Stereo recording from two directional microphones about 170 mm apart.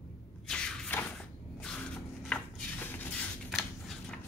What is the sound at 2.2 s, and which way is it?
Dishes, 10° left (ahead or behind).